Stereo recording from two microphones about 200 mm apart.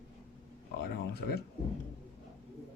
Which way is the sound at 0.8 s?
55° left (ahead or behind).